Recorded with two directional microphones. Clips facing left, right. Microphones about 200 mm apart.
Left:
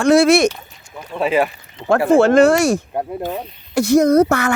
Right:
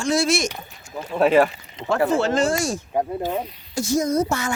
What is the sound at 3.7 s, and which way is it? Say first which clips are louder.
Speech: left 9 dB; 65° left (ahead or behind).